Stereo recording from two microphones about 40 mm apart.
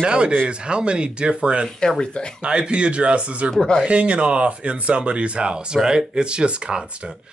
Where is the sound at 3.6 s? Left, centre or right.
Centre.